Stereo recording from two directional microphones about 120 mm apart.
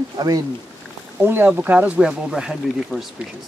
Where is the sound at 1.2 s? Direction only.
15° right (ahead or behind); by 3.0 s centre (ahead or behind).